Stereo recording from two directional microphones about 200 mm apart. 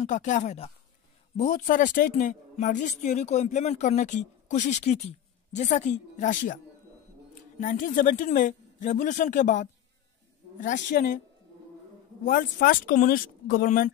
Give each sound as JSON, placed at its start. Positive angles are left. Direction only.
{"t": 0.0, "sound": "a woman's voice", "side_deg": 40}
{"t": 12.3, "sound": "speech", "side_deg": 45}